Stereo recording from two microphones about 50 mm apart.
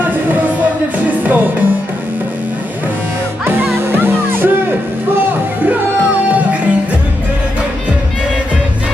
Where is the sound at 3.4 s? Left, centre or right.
Right.